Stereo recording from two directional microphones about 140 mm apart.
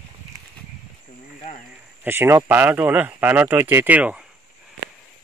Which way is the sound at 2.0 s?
15° right (ahead or behind).